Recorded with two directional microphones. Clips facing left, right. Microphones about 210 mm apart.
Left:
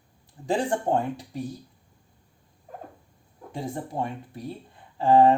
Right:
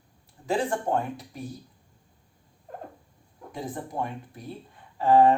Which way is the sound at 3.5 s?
30° left (ahead or behind).